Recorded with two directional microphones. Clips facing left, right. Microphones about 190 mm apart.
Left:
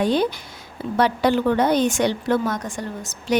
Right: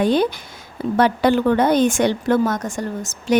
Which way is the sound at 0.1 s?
50° right (ahead or behind).